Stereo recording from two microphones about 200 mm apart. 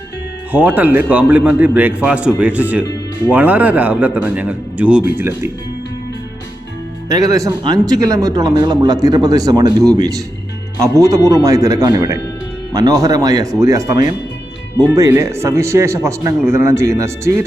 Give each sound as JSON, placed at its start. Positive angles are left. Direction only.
{"t": 0.5, "sound": "speech", "side_deg": -10}
{"t": 7.1, "sound": "speech", "side_deg": -15}